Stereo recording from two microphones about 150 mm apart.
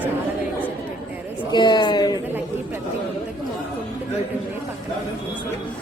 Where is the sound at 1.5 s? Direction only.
30° left (ahead or behind).